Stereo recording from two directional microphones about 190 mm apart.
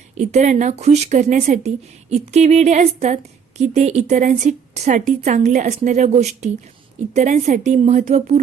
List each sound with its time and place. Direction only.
0.2 s a woman's voice: 35° right (ahead or behind)